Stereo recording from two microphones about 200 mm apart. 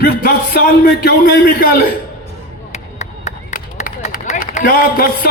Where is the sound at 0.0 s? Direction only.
45° left (ahead or behind).